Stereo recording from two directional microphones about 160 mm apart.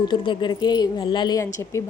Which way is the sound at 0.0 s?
30° left (ahead or behind).